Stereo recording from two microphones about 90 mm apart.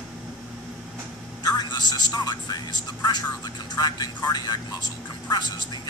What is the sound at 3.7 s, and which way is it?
Speech, 50° left (ahead or behind).